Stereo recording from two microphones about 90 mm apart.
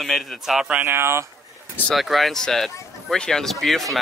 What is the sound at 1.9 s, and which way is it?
Speech, centre (ahead or behind).